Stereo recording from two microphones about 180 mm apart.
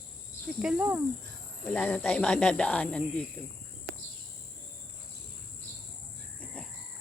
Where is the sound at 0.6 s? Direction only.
10° right (ahead or behind).